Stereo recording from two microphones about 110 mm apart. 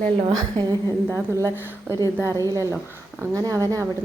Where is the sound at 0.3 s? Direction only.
40° right (ahead or behind).